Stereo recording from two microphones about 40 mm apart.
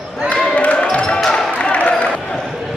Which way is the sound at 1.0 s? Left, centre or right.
Centre.